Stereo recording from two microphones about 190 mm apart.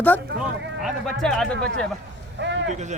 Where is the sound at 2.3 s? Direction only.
70° right (ahead or behind).